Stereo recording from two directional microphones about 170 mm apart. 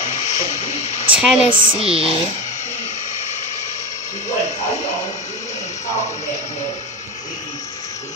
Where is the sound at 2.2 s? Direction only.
45° left (ahead or behind).